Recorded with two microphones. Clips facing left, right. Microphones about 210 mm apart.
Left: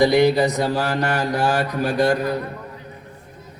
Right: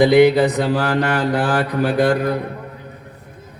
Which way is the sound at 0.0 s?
55° right (ahead or behind).